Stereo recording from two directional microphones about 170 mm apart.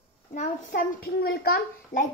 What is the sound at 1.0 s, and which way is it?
A child's voice, 65° left (ahead or behind).